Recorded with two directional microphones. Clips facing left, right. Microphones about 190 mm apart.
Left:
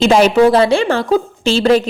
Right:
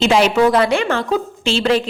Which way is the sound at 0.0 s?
45° left (ahead or behind).